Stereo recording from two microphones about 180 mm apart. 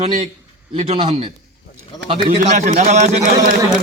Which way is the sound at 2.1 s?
45° right (ahead or behind).